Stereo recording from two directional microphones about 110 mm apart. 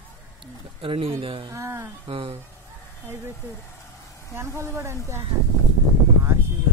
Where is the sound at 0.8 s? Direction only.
60° right (ahead or behind).